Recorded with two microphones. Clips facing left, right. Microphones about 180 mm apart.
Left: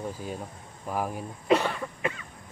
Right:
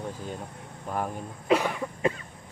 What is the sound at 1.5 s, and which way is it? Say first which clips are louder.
Cough: even; 10° right (ahead or behind).